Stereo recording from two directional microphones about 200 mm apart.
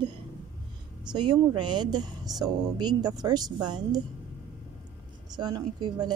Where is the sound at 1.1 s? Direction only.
20° right (ahead or behind).